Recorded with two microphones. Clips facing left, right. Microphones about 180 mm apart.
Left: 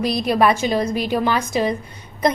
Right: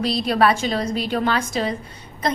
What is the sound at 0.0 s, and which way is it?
A woman's voice, 10° left (ahead or behind).